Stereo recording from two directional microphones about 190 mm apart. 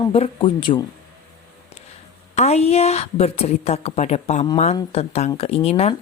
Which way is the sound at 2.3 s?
35° left (ahead or behind).